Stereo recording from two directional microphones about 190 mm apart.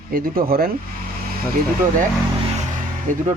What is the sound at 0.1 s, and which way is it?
Speech, 50° right (ahead or behind).